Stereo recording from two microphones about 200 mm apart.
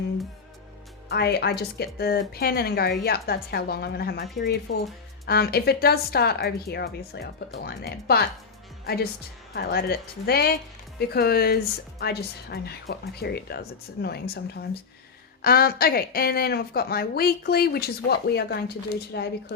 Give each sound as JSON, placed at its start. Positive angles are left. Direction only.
{"t": 1.1, "sound": "speech", "side_deg": 55}
{"t": 9.6, "sound": "speech", "side_deg": 50}